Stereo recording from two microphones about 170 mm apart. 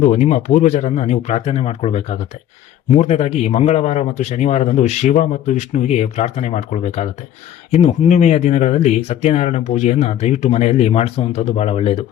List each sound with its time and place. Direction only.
0.0 s speech: 45° left (ahead or behind)